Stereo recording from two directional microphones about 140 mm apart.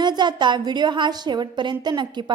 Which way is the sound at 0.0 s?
30° right (ahead or behind).